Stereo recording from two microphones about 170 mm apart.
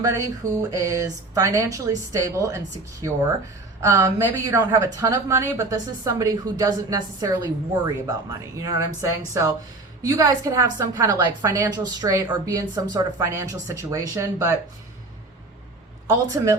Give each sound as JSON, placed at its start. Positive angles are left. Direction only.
{"t": 0.0, "sound": "a woman's voice", "side_deg": -20}
{"t": 3.8, "sound": "a woman's voice", "side_deg": -15}
{"t": 16.0, "sound": "a woman's voice", "side_deg": -20}